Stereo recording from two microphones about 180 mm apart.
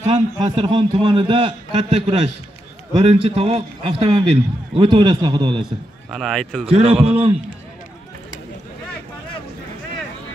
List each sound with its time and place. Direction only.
0.1 s a man's voice: 30° right (ahead or behind)
6.0 s speech: centre (ahead or behind)
6.7 s a man's voice: 35° right (ahead or behind)